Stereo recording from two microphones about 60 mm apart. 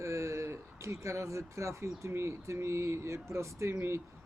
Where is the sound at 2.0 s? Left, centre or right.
Right.